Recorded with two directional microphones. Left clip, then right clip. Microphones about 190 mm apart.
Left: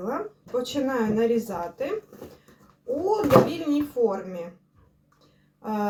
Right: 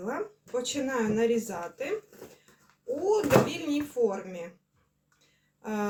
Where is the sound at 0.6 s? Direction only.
5° right (ahead or behind).